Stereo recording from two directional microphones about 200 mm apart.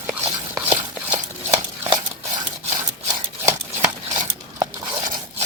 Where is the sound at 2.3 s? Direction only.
40° right (ahead or behind).